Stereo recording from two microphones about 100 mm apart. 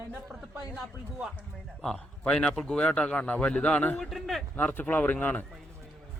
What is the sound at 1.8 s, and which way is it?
Speech, 5° left (ahead or behind).